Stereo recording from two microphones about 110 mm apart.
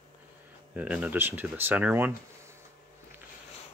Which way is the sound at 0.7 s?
10° right (ahead or behind).